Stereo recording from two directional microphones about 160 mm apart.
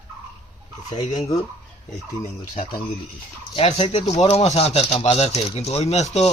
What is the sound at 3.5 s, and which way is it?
Speech, 35° left (ahead or behind).